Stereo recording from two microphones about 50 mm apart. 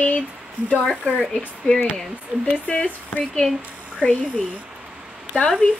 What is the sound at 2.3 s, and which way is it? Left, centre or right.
Speech, right.